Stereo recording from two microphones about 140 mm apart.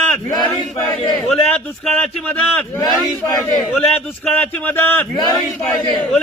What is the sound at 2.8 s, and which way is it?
Speech, 25° left (ahead or behind).